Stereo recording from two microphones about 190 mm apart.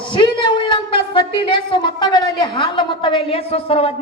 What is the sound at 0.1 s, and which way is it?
A woman's voice, 25° left (ahead or behind).